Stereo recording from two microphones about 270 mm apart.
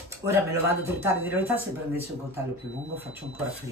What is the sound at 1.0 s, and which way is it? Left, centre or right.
Speech, centre.